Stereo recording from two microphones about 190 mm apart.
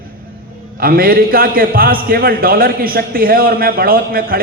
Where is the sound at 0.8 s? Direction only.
50° right (ahead or behind).